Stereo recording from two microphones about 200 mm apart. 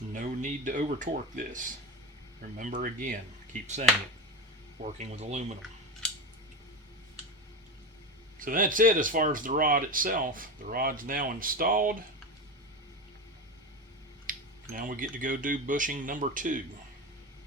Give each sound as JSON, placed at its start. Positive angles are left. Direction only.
{"t": 0.1, "sound": "speech", "side_deg": -40}
{"t": 8.4, "sound": "speech", "side_deg": -45}
{"t": 14.3, "sound": "speech", "side_deg": -45}